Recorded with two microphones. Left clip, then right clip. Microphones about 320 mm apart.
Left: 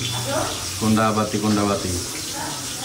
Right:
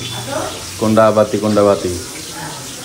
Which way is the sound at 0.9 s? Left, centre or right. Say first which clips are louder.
Right 10 dB; centre.